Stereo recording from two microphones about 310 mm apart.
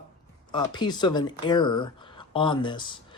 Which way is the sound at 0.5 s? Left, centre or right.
Centre.